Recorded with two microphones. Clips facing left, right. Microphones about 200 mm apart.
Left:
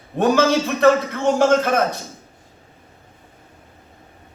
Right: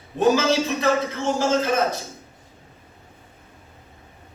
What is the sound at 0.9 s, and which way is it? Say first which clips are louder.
Speech: left 5 dB; 55° left (ahead or behind).